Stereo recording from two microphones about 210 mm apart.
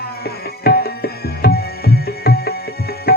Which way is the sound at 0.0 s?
50° left (ahead or behind).